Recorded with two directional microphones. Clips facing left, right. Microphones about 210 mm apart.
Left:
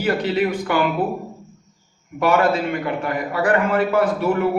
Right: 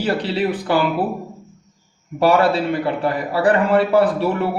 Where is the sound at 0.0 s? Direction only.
30° right (ahead or behind).